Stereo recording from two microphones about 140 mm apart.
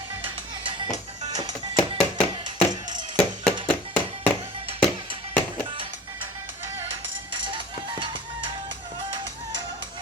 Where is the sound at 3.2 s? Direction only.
10° left (ahead or behind).